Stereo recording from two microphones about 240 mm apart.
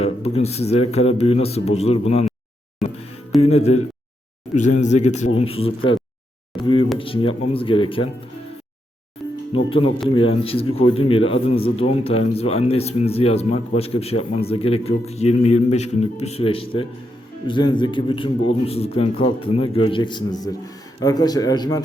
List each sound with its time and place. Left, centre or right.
0.0 s speech: left
2.8 s music: centre
3.4 s speech: left
6.5 s a sound: centre
7.0 s speech: left
9.5 s a man's voice: left